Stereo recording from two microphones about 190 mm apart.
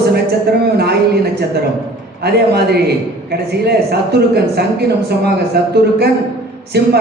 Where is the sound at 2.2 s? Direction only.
60° right (ahead or behind).